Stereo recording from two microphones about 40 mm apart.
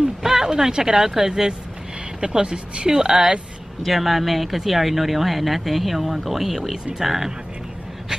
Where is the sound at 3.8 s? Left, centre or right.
Centre.